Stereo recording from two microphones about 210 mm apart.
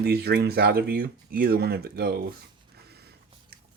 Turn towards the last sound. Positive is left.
turn(degrees=-50)  # may be behind; listen again after turning